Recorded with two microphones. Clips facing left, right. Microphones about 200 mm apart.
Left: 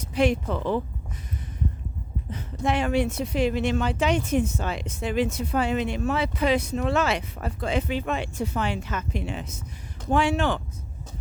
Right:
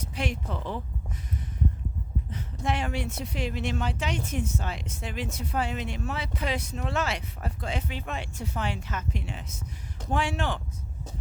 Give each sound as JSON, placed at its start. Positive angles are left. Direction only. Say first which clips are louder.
{"t": 0.1, "sound": "speech", "louder": "left 11 dB", "side_deg": 90}
{"t": 2.3, "sound": "speech", "louder": "left 5 dB", "side_deg": 90}